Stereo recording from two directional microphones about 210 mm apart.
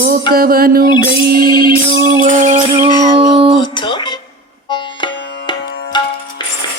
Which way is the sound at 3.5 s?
20° left (ahead or behind).